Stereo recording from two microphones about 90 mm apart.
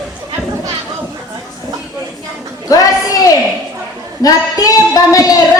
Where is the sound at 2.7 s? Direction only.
40° left (ahead or behind).